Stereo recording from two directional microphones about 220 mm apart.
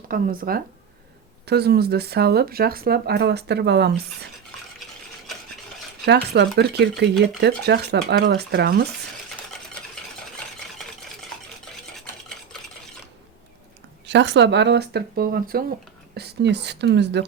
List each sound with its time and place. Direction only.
0.1 s speech: 40° right (ahead or behind)
6.1 s speech: 50° right (ahead or behind)
11.9 s stir: centre (ahead or behind)
14.1 s speech: 55° right (ahead or behind)